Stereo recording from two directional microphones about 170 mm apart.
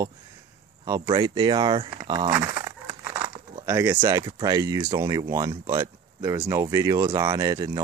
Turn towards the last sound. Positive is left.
turn(degrees=-20)  # may be behind; listen again after turning